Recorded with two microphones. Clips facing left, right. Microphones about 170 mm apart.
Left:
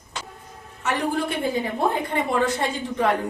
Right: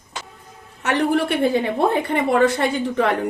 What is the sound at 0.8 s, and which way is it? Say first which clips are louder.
A woman's voice: right 5 dB; 70° right (ahead or behind).